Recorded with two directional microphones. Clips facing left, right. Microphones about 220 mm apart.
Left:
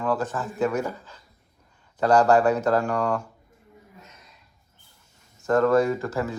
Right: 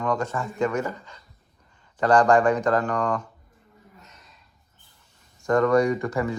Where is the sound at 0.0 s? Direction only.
5° left (ahead or behind).